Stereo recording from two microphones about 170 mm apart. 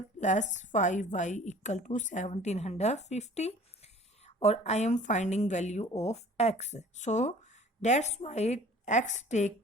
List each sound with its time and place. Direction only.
0.2 s a woman's voice: 45° left (ahead or behind)